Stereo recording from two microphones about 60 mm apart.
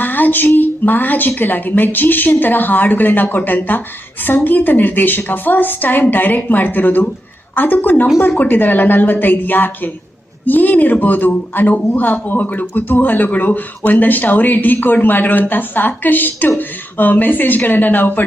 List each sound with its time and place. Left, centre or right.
0.0 s a man's voice: left